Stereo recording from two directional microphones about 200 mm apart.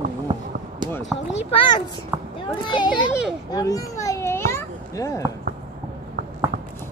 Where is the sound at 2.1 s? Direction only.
10° right (ahead or behind).